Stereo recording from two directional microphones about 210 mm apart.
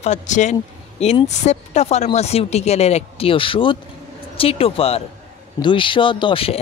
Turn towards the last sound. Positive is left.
turn(degrees=25)  # may be behind; listen again after turning